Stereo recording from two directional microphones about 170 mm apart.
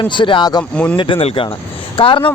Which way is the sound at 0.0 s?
30° left (ahead or behind).